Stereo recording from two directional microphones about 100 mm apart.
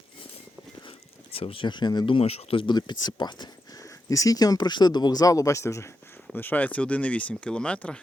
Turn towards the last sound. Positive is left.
turn(degrees=10)  # may be behind; listen again after turning